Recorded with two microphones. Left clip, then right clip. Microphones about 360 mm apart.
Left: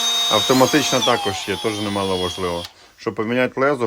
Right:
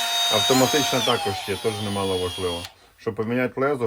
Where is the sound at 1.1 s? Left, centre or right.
Left.